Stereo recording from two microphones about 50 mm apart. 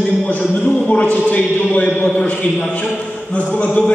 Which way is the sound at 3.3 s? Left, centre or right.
Left.